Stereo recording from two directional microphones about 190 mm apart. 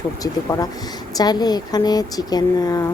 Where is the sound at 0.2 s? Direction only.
20° left (ahead or behind).